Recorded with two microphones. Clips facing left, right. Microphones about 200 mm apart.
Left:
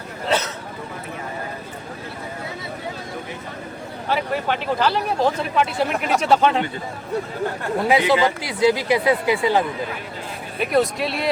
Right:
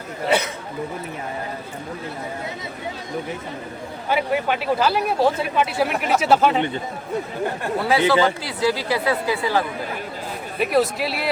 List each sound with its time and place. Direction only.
0.3 s chatter: 15° right (ahead or behind)
4.1 s speech: 10° right (ahead or behind)
7.8 s speech: 15° left (ahead or behind)
10.6 s speech: centre (ahead or behind)